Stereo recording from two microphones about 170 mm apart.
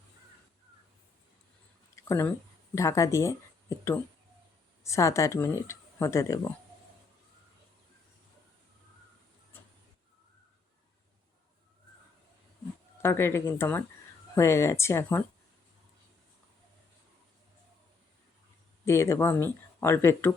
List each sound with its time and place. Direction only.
2.0 s speech: 15° left (ahead or behind)
13.0 s speech: 15° left (ahead or behind)
18.9 s speech: 15° left (ahead or behind)